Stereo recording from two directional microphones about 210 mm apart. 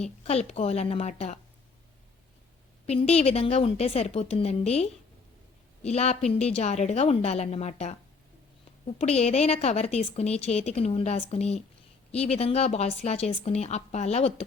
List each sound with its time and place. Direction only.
0.0 s a woman's voice: 30° left (ahead or behind)
2.8 s a woman's voice: 30° left (ahead or behind)
9.0 s a woman's voice: 30° left (ahead or behind)